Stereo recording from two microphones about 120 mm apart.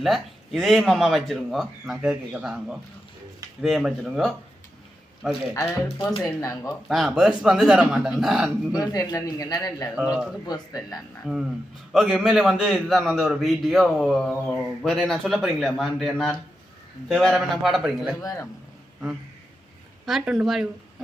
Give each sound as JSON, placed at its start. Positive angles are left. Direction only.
{"t": 0.0, "sound": "a man's voice", "side_deg": 0}
{"t": 6.2, "sound": "speech", "side_deg": 25}
{"t": 6.7, "sound": "a man's voice", "side_deg": 0}
{"t": 8.7, "sound": "speech", "side_deg": 30}
{"t": 11.3, "sound": "a man's voice", "side_deg": -5}
{"t": 18.2, "sound": "speech", "side_deg": 30}
{"t": 20.1, "sound": "a man's voice", "side_deg": -5}